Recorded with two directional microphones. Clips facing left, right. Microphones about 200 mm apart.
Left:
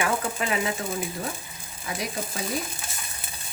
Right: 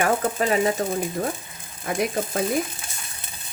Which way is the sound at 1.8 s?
55° right (ahead or behind).